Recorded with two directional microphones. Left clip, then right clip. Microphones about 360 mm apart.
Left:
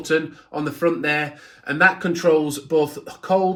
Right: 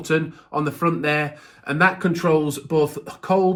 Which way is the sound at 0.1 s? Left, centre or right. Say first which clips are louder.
Even; centre.